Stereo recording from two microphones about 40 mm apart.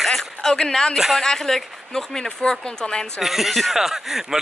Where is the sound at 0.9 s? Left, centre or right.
Centre.